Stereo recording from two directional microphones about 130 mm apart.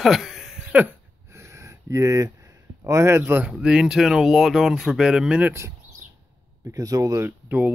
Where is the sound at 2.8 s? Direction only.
25° right (ahead or behind).